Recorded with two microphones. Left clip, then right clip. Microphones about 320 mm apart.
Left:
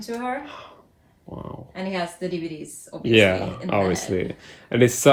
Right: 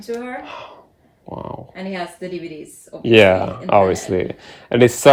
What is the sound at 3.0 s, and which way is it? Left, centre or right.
Speech, right.